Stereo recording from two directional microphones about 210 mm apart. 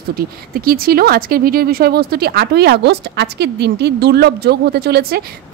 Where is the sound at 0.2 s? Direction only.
45° right (ahead or behind).